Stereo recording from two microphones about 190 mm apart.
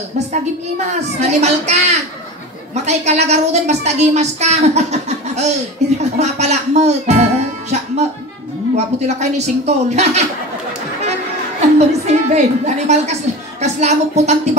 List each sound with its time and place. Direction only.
0.3 s a woman's voice: 35° right (ahead or behind)
11.8 s a woman's voice: 35° right (ahead or behind)